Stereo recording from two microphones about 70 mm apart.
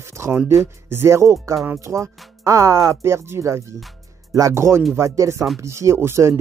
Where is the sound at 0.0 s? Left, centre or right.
Right.